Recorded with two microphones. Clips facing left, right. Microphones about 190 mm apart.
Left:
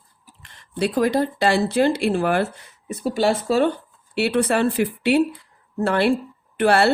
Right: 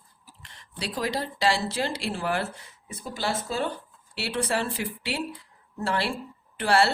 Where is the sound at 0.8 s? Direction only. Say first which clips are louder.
Left 10 dB; 55° left (ahead or behind); by 3.7 s 75° left (ahead or behind).